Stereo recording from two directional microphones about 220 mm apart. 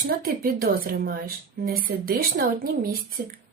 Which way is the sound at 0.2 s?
40° right (ahead or behind).